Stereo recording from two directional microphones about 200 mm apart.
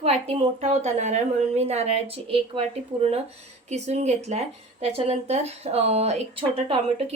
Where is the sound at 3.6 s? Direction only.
35° right (ahead or behind).